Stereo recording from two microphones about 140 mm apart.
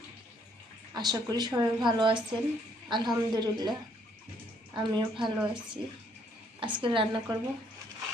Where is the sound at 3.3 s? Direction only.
30° right (ahead or behind).